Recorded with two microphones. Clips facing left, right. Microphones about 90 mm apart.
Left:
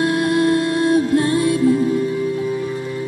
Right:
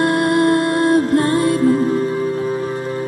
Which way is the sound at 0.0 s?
50° right (ahead or behind).